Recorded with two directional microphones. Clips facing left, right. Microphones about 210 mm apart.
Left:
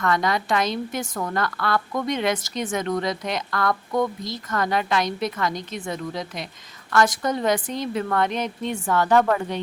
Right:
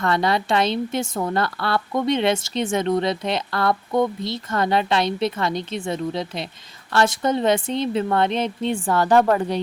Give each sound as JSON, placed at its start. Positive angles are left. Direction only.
{"t": 0.0, "sound": "a woman's voice", "side_deg": -30}